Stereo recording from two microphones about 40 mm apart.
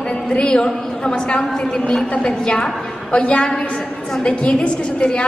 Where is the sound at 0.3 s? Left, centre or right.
Left.